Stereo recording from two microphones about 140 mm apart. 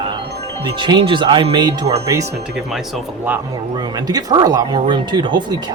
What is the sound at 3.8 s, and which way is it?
Speech, 30° right (ahead or behind).